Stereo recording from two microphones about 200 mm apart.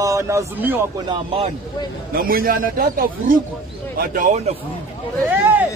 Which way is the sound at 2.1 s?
45° right (ahead or behind).